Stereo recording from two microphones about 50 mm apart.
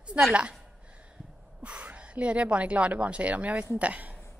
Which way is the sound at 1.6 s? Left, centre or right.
Right.